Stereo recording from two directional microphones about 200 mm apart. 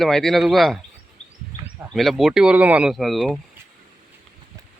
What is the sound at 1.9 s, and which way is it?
Speech, centre (ahead or behind).